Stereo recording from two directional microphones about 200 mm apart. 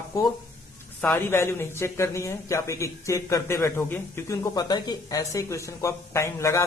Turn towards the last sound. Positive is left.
turn(degrees=15)  # may be behind; listen again after turning